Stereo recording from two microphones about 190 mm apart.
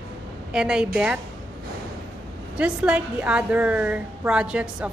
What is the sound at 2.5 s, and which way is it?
A woman's voice, 5° right (ahead or behind).